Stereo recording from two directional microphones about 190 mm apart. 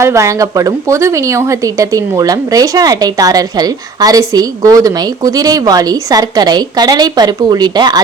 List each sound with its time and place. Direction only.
0.0 s a woman's voice: 15° right (ahead or behind)